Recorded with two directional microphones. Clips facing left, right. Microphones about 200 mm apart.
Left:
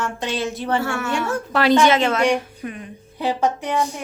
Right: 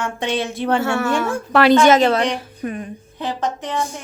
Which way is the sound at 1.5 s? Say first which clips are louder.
Right 3 dB; 65° right (ahead or behind).